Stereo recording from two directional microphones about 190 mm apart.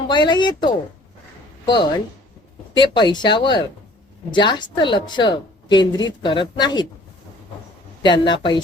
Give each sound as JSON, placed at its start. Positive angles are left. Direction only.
{"t": 0.1, "sound": "speech", "side_deg": 25}
{"t": 8.0, "sound": "speech", "side_deg": 25}